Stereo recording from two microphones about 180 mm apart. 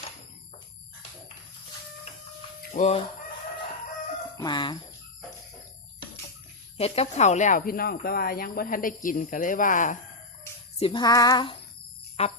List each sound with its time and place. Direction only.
2.7 s fowl: 40° left (ahead or behind)
4.4 s speech: 25° left (ahead or behind)
6.7 s speech: 35° left (ahead or behind)
10.8 s female singing: 30° left (ahead or behind)
12.2 s fowl: 35° left (ahead or behind)